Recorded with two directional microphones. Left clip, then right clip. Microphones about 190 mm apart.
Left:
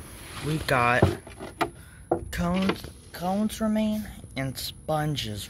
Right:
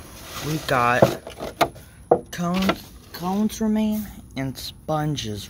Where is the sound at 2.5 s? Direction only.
55° right (ahead or behind).